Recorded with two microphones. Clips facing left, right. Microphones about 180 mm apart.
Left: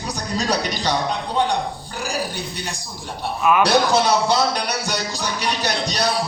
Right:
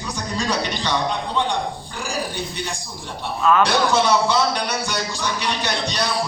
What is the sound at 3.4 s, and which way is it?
Speech, 15° left (ahead or behind).